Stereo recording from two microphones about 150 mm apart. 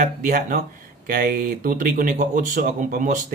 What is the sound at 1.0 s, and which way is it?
Speech, 80° right.